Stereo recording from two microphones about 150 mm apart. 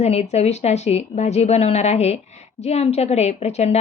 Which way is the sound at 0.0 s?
45° left (ahead or behind).